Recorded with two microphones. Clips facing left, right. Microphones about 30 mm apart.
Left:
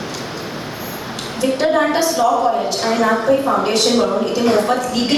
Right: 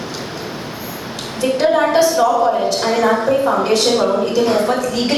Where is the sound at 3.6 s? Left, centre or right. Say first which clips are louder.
Right 1 dB; centre.